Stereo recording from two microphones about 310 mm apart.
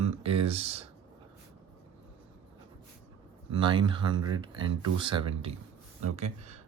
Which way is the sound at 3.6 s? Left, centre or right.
Centre.